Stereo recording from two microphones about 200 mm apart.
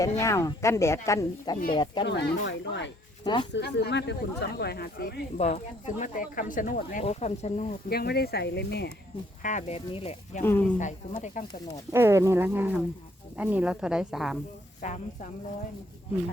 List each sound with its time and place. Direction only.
0.0 s speech: 15° left (ahead or behind)
2.0 s speech: 60° left (ahead or behind)
5.4 s speech: 35° left (ahead or behind)
7.9 s speech: 50° left (ahead or behind)
9.4 s speech: 40° left (ahead or behind)
10.4 s speech: 10° left (ahead or behind)
10.8 s speech: 40° left (ahead or behind)
11.9 s speech: 10° right (ahead or behind)